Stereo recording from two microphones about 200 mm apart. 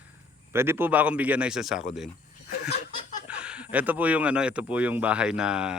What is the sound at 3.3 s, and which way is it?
Speech, 5° right (ahead or behind).